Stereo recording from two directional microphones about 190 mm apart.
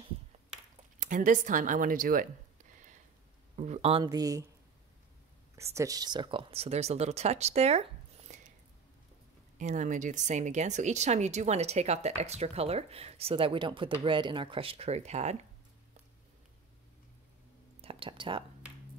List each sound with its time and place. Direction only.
0.9 s speech: 45° right (ahead or behind)
3.5 s speech: 35° right (ahead or behind); by 4.5 s 20° right (ahead or behind)
5.6 s speech: 15° right (ahead or behind); by 8.4 s 35° right (ahead or behind)
9.6 s speech: 40° right (ahead or behind)
17.8 s speech: 30° right (ahead or behind)